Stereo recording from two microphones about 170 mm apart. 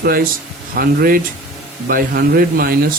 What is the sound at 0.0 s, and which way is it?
Speech, 60° right (ahead or behind).